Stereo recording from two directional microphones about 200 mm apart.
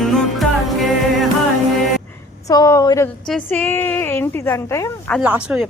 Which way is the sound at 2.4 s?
15° left (ahead or behind).